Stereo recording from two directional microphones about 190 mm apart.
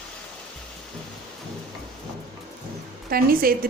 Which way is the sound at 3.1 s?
50° right (ahead or behind).